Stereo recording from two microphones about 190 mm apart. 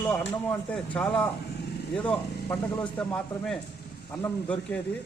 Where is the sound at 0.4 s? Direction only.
5° left (ahead or behind).